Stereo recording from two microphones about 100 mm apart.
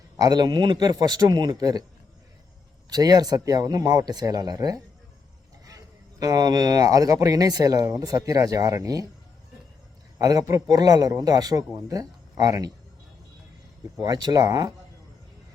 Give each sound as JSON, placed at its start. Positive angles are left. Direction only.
{"t": 0.2, "sound": "a man's voice", "side_deg": -40}
{"t": 2.9, "sound": "speech", "side_deg": -40}
{"t": 6.1, "sound": "speech", "side_deg": -40}
{"t": 10.2, "sound": "speech", "side_deg": -40}
{"t": 14.0, "sound": "speech", "side_deg": -45}